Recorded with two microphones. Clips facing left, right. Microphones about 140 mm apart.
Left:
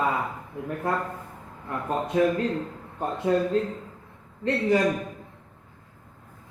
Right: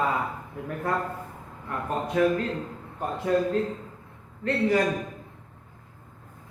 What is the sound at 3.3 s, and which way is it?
Speech, 25° left (ahead or behind).